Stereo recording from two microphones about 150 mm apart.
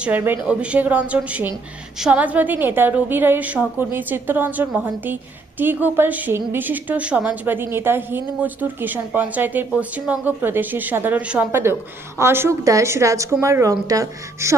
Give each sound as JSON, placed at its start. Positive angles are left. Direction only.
{"t": 0.0, "sound": "a woman's voice", "side_deg": -10}